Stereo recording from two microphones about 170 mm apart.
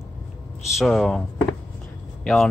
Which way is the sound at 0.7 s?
Centre (ahead or behind).